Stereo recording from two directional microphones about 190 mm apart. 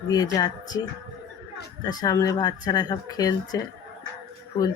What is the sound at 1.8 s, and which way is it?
Speech, 20° left (ahead or behind).